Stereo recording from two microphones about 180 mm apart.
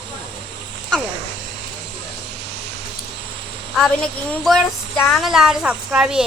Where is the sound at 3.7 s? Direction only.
5° left (ahead or behind).